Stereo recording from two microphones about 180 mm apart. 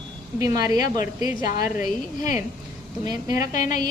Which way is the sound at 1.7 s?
45° left (ahead or behind).